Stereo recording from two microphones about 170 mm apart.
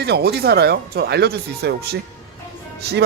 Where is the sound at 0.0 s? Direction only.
70° right (ahead or behind).